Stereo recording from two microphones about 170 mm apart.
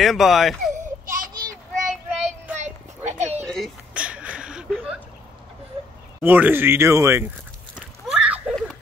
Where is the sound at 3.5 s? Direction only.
5° right (ahead or behind).